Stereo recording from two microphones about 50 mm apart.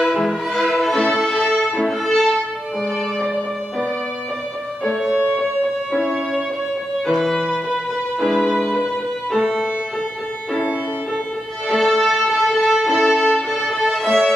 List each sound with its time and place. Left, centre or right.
0.2 s violin: centre
1.1 s music: centre
5.1 s music: right
7.1 s music: centre
11.7 s music: centre